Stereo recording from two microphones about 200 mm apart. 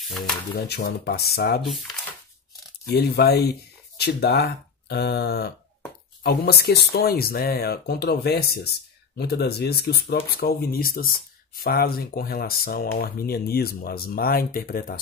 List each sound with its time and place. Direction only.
0.6 s speech: 50° left (ahead or behind)
1.6 s speech: centre (ahead or behind)
2.9 s speech: 55° left (ahead or behind)